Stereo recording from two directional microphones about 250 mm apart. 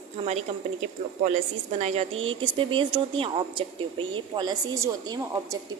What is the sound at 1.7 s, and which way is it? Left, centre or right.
A woman's voice, right.